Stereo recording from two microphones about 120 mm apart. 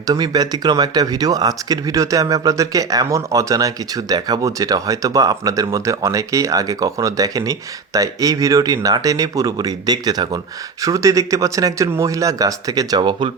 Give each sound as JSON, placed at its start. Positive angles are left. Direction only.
{"t": 0.1, "sound": "speech", "side_deg": -35}
{"t": 13.0, "sound": "speech", "side_deg": -45}